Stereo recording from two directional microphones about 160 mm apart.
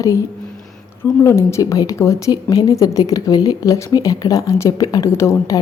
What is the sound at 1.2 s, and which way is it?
A woman's voice, 20° left (ahead or behind).